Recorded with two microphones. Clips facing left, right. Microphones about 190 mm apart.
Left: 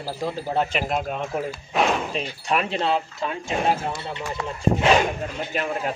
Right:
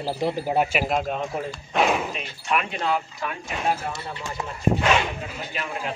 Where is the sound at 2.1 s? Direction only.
30° left (ahead or behind).